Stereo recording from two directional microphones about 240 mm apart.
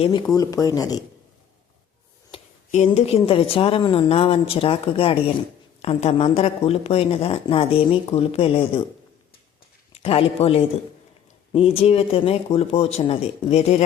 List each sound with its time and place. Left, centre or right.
0.0 s speech: centre
2.3 s speech: left
9.9 s speech: left